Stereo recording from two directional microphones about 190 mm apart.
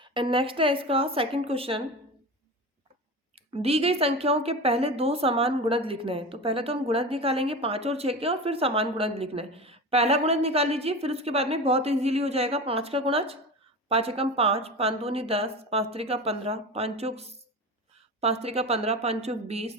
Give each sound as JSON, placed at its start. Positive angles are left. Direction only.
{"t": 0.0, "sound": "a woman's voice", "side_deg": -25}
{"t": 3.5, "sound": "a woman's voice", "side_deg": -30}